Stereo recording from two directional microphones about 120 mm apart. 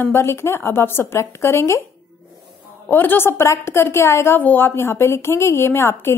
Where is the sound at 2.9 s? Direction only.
20° left (ahead or behind).